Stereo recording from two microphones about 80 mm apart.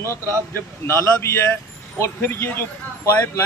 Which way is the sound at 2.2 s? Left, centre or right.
Left.